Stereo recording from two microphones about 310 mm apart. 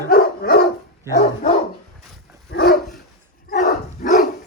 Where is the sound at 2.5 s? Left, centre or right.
Left.